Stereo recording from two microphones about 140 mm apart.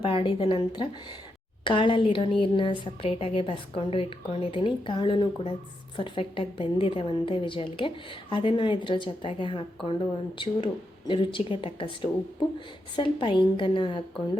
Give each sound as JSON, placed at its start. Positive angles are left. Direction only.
{"t": 0.0, "sound": "a woman's voice", "side_deg": 40}